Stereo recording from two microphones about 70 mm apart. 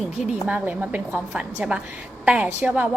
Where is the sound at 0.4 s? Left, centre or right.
Centre.